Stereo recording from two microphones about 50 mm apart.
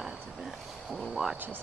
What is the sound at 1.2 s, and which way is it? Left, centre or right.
Speech, centre.